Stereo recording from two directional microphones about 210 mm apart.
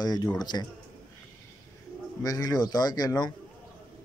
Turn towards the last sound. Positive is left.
turn(degrees=20)  # may be behind; listen again after turning